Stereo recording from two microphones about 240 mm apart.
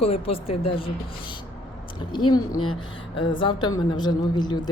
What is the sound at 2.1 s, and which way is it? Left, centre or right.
A woman's voice, centre.